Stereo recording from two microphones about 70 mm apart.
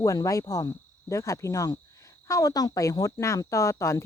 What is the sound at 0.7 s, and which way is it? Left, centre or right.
Cricket, left.